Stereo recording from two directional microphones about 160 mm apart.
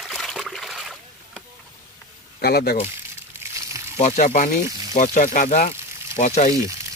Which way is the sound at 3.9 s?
40° left (ahead or behind).